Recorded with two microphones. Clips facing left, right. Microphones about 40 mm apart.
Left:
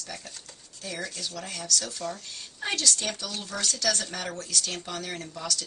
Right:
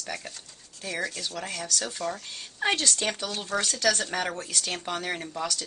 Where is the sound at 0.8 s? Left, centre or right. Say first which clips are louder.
Right 4 dB; centre.